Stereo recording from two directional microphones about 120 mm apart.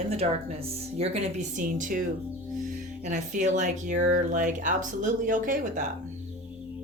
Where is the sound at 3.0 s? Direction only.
85° right.